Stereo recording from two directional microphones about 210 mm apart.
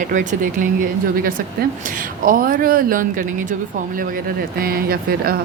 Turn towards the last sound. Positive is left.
turn(degrees=-45)  # may be behind; listen again after turning